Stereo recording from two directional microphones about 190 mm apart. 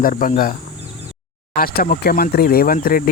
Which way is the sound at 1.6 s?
50° left (ahead or behind).